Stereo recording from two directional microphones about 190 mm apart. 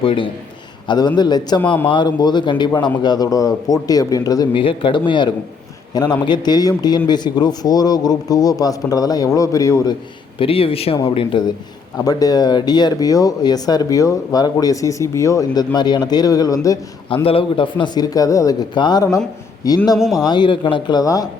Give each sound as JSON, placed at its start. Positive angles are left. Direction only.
{"t": 0.0, "sound": "speech", "side_deg": 30}
{"t": 10.3, "sound": "speech", "side_deg": 30}
{"t": 17.2, "sound": "speech", "side_deg": 30}
{"t": 20.0, "sound": "a man's voice", "side_deg": 0}
{"t": 20.2, "sound": "speech", "side_deg": 25}